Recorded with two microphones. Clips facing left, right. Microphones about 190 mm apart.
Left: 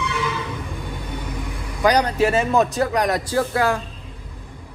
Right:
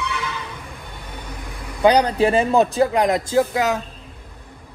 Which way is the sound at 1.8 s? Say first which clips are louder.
Right 2 dB; 30° right (ahead or behind).